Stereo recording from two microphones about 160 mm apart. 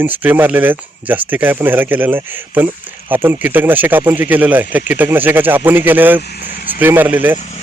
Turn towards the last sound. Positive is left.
turn(degrees=-10)  # may be behind; listen again after turning